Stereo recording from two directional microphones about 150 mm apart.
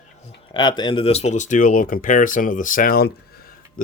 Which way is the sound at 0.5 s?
30° left (ahead or behind).